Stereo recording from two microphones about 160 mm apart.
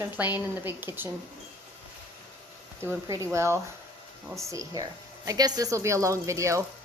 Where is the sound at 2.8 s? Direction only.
15° right (ahead or behind).